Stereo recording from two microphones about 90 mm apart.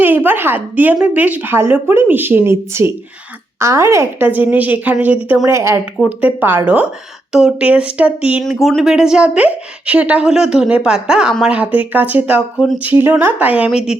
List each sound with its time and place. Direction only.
0.0 s a woman's voice: 20° right (ahead or behind)
4.2 s a woman's voice: 20° right (ahead or behind)
5.5 s a woman's voice: 30° right (ahead or behind)
6.1 s speech: 20° right (ahead or behind)
7.3 s a woman's voice: 5° right (ahead or behind)